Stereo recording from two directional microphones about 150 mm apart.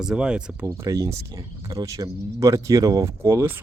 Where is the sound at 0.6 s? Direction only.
20° right (ahead or behind).